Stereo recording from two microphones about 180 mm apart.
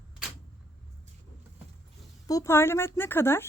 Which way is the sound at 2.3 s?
15° left (ahead or behind).